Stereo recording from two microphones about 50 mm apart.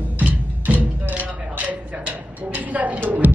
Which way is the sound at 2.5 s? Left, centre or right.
Right.